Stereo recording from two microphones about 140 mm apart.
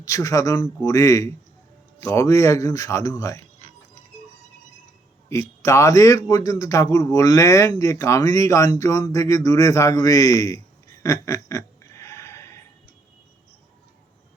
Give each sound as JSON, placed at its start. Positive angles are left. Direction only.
{"t": 0.0, "sound": "a man's voice", "side_deg": 25}
{"t": 5.3, "sound": "a man's voice", "side_deg": 20}